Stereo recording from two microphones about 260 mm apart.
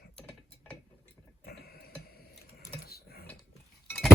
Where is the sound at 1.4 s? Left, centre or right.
Left.